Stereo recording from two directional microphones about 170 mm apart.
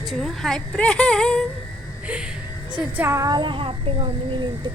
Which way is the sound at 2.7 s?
10° right (ahead or behind).